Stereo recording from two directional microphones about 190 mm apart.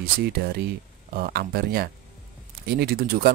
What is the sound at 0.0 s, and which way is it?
Speech, 55° right (ahead or behind).